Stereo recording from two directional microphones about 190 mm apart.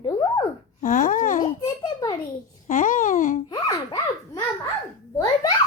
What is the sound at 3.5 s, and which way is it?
Baby laughter, 20° left (ahead or behind).